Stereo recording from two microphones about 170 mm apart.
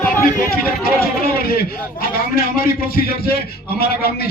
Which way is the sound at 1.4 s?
65° left (ahead or behind).